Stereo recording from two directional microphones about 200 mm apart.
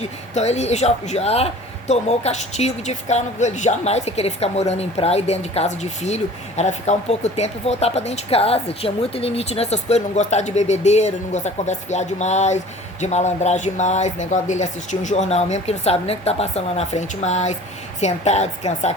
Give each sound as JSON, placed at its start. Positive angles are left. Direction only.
{"t": 0.3, "sound": "speech", "side_deg": 35}